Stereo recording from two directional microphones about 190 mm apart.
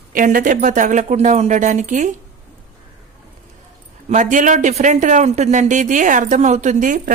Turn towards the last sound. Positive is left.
turn(degrees=-40)  # may be behind; listen again after turning